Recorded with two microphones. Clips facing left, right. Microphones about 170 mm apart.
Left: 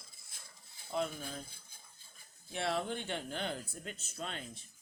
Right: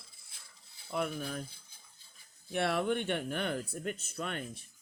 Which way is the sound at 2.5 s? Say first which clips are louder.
Right 5 dB; 65° right (ahead or behind).